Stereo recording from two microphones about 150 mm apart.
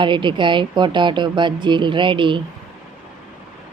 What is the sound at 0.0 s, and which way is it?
Speech, 30° right (ahead or behind).